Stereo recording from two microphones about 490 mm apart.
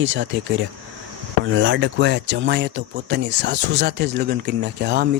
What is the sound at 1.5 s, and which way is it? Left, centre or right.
Speech, right.